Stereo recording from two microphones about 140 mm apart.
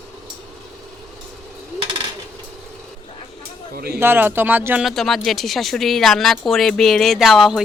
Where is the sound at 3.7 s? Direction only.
90° right.